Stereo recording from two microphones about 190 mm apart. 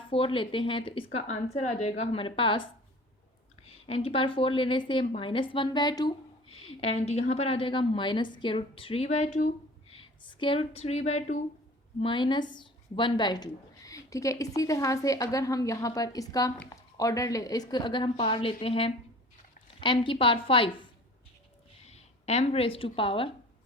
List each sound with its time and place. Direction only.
0.1 s a woman's voice: 30° left (ahead or behind)
3.8 s a woman's voice: 30° left (ahead or behind)
6.7 s a woman's voice: 30° left (ahead or behind)
10.0 s a woman's voice: 25° left (ahead or behind)
21.8 s speech: 35° left (ahead or behind)